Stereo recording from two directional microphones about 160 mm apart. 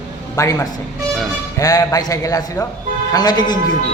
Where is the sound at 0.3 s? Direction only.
20° left (ahead or behind).